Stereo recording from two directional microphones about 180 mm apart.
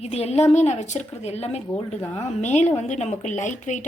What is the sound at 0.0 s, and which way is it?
A woman's voice, 35° left (ahead or behind).